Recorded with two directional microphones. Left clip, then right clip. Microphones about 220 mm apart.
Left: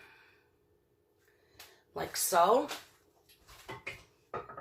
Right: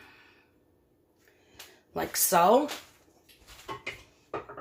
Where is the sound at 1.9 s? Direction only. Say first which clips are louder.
Right 5 dB; 50° right (ahead or behind).